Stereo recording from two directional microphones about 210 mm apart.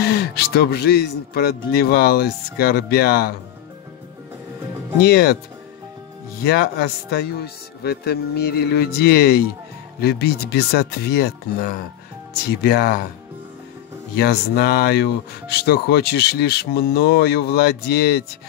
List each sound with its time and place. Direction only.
0.0 s speech: 50° left (ahead or behind)
5.0 s speech: 50° left (ahead or behind)
6.4 s speech: 45° left (ahead or behind)
14.1 s speech: 50° left (ahead or behind)